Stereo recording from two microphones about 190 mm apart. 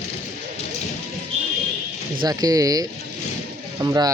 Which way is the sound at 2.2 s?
20° right (ahead or behind).